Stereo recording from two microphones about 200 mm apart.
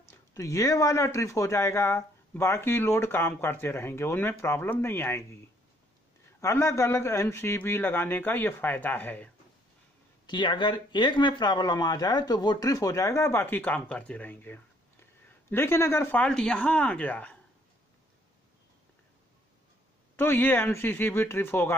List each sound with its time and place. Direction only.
0.0 s speech: 15° left (ahead or behind)
6.4 s speech: 15° left (ahead or behind)
10.2 s speech: 25° left (ahead or behind); by 17.4 s 5° left (ahead or behind)
20.2 s speech: 10° left (ahead or behind)